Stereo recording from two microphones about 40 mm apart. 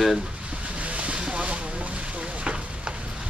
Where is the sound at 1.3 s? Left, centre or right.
Right.